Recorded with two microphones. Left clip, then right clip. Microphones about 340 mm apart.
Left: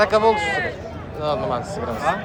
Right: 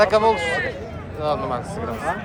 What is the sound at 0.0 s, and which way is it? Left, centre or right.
Speech, centre.